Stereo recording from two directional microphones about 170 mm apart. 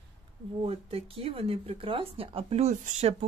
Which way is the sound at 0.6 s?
35° right (ahead or behind).